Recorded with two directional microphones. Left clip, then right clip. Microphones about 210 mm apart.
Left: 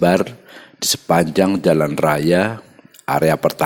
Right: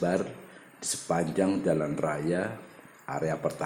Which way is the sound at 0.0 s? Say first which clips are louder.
Left 13 dB; 40° left (ahead or behind).